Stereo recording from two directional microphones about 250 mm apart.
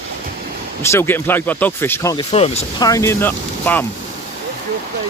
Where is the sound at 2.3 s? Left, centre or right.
Left.